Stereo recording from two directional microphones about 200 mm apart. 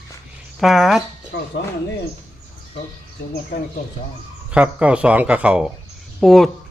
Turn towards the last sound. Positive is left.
turn(degrees=0)  # may be behind; listen again after turning